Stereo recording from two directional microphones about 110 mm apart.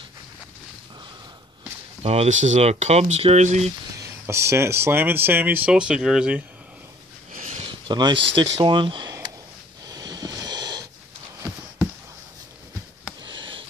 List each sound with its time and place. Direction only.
2.0 s speech: 80° right
4.0 s speech: 25° right (ahead or behind); by 6.4 s 5° right (ahead or behind)
7.6 s speech: 45° right (ahead or behind)
9.8 s a sound: 35° right (ahead or behind)
13.2 s sniff: 45° right (ahead or behind)